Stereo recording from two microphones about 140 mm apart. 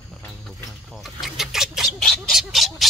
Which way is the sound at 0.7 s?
Centre (ahead or behind).